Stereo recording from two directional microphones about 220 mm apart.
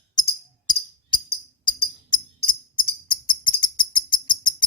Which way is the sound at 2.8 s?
20° left (ahead or behind).